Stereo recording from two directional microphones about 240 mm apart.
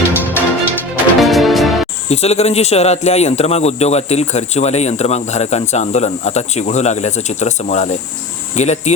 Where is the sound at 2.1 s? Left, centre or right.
Left.